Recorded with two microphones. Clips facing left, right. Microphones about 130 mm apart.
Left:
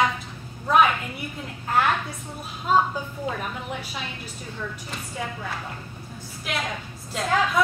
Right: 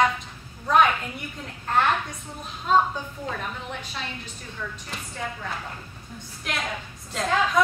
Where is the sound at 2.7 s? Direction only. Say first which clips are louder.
Even; 5° left (ahead or behind).